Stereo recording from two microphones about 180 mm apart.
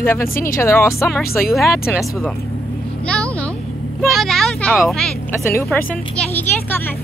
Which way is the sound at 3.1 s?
5° left (ahead or behind).